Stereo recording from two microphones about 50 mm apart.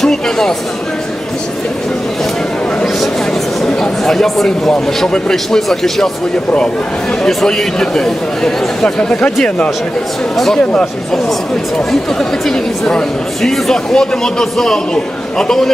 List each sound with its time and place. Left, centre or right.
0.0 s speech: centre
3.6 s speech: centre
7.4 s speech: centre
10.3 s speech: centre
10.6 s speech: left
11.9 s speech: centre